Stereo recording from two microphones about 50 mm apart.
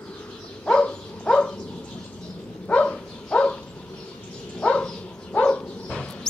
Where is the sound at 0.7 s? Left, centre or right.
Centre.